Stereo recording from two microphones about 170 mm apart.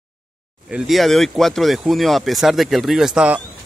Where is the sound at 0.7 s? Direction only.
5° right (ahead or behind).